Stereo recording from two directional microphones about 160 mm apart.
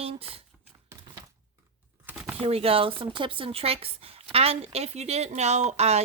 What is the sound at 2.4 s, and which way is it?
A woman's voice, 40° right (ahead or behind).